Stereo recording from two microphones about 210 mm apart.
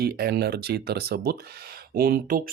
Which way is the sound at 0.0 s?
50° right (ahead or behind).